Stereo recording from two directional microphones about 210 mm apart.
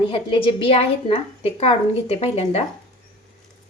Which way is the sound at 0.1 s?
25° left (ahead or behind).